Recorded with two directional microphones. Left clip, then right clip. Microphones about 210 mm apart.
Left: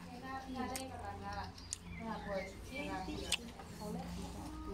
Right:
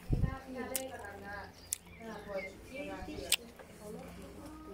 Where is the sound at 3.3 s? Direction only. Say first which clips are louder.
Right 5 dB; 30° right (ahead or behind).